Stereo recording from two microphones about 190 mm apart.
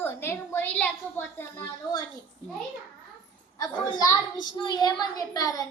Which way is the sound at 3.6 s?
20° left (ahead or behind).